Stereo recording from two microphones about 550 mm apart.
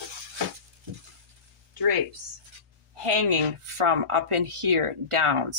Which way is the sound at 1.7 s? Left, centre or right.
Right.